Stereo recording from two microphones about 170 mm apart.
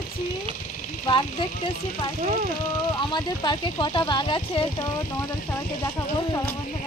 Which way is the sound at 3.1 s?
25° left (ahead or behind).